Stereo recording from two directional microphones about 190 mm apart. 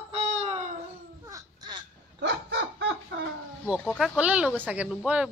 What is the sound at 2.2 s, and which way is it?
Chicken, 70° right (ahead or behind).